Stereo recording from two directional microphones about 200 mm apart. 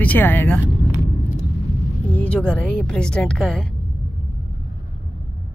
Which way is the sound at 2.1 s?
5° left (ahead or behind).